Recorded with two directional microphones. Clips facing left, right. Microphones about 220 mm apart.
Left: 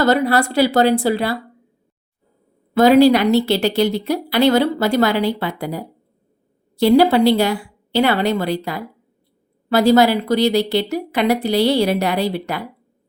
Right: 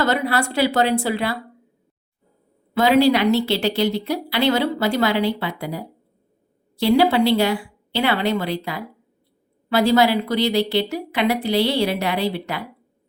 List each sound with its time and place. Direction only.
0.0 s a woman's voice: 40° left (ahead or behind)
2.7 s a woman's voice: 40° left (ahead or behind)